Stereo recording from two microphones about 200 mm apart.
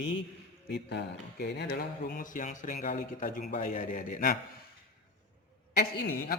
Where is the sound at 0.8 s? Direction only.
55° left (ahead or behind).